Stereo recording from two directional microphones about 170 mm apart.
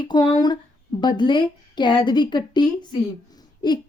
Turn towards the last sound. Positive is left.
turn(degrees=25)  # may be behind; listen again after turning